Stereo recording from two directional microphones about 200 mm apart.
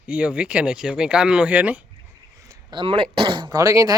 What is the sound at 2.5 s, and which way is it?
Speech, 20° right (ahead or behind).